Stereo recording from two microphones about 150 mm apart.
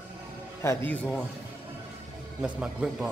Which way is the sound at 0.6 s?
15° left (ahead or behind).